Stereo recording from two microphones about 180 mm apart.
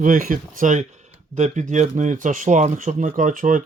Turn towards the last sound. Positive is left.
turn(degrees=-45)  # may be behind; listen again after turning